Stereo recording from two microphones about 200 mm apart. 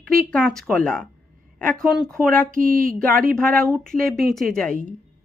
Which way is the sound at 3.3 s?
5° left (ahead or behind).